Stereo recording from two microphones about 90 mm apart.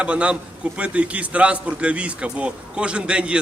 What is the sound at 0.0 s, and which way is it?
A man's voice, 15° right (ahead or behind).